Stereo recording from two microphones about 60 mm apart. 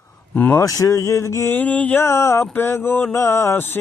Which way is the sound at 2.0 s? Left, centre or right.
Left.